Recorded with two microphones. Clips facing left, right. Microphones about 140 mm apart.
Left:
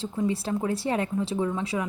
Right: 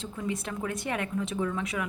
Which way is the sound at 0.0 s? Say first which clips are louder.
Left 6 dB; 30° left (ahead or behind).